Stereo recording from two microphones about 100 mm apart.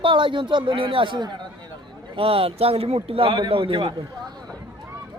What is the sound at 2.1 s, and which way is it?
A man's voice, 70° right (ahead or behind).